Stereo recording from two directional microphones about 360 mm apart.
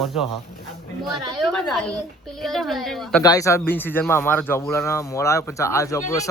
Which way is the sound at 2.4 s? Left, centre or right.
Centre.